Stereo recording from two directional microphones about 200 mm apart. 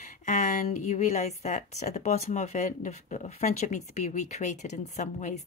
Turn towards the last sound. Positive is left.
turn(degrees=35)  # may be behind; listen again after turning